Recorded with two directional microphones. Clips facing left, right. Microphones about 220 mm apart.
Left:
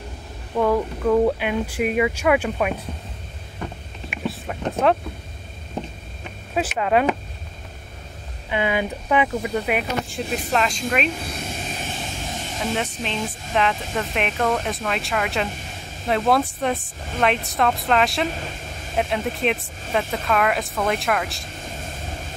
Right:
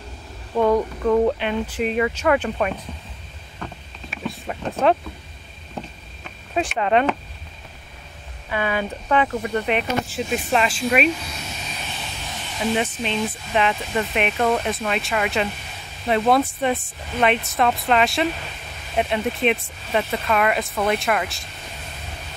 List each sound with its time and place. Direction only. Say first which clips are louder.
0.6 s speech: right 2 dB; centre (ahead or behind)
4.3 s vehicle: left 1 dB; centre (ahead or behind)
6.8 s speech: even; 5° left (ahead or behind)
8.5 s speech: left 1 dB; 20° left (ahead or behind)
10.0 s speech: right 2 dB; 5° right (ahead or behind)
11.1 s a sound: left 4 dB; 50° left (ahead or behind)
12.7 s speech: right 4 dB; centre (ahead or behind)
21.6 s vehicle: left 5 dB; 45° left (ahead or behind)